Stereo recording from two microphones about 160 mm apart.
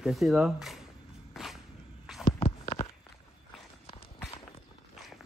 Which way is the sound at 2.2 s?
40° left (ahead or behind).